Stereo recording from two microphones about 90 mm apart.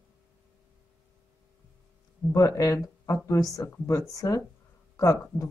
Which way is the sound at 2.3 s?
35° left (ahead or behind).